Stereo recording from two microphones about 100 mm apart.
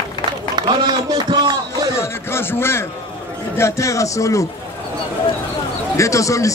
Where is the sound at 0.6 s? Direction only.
45° right (ahead or behind).